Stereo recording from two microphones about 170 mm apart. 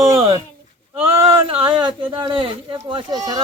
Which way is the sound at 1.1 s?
35° right (ahead or behind).